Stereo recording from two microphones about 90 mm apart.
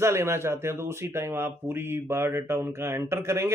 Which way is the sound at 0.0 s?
30° right (ahead or behind).